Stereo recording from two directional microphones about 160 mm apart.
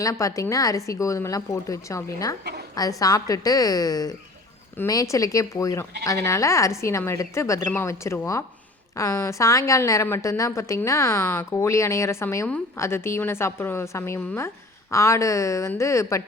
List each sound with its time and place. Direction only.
0.0 s a woman's voice: 20° left (ahead or behind)
2.4 s a sound: 80° right
3.0 s a woman's voice: 20° left (ahead or behind)